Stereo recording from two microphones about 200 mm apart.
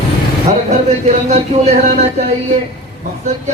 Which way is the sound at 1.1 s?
35° right (ahead or behind).